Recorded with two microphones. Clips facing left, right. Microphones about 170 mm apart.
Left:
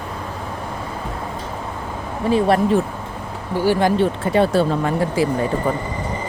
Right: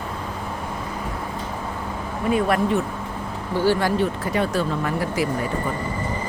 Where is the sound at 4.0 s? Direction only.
30° left (ahead or behind).